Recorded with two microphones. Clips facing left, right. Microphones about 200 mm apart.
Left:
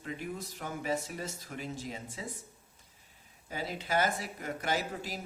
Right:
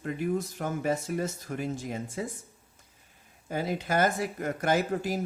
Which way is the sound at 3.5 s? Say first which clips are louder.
Right 5 dB; 50° right (ahead or behind).